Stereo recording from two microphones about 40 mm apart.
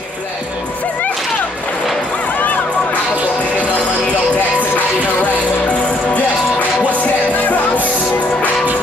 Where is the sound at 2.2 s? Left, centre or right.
Left.